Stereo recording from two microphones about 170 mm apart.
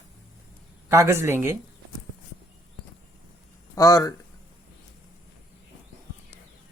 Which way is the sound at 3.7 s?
20° left (ahead or behind).